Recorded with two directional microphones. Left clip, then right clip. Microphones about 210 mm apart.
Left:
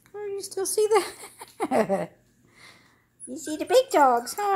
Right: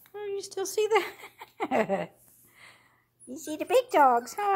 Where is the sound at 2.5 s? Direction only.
15° right (ahead or behind).